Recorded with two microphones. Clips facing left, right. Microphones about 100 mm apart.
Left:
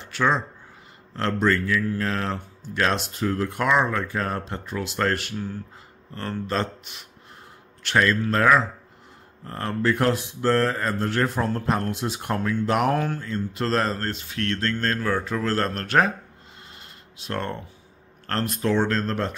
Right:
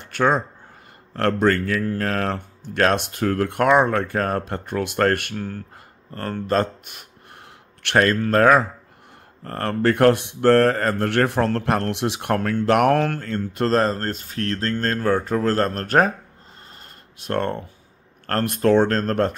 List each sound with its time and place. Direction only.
0.0 s a sound: 50° right (ahead or behind)
1.1 s speech: 55° right (ahead or behind)
17.2 s speech: 55° right (ahead or behind)